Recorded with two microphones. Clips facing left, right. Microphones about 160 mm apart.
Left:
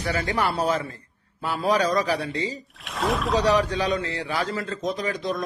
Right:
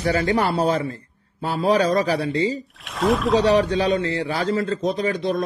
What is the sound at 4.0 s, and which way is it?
Speech, 30° right (ahead or behind).